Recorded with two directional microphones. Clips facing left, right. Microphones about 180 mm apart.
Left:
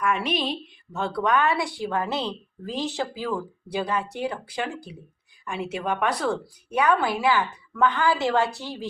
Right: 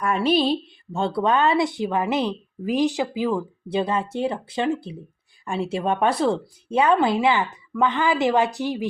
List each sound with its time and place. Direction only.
0.0 s a woman's voice: 35° right (ahead or behind); by 8.9 s 15° right (ahead or behind)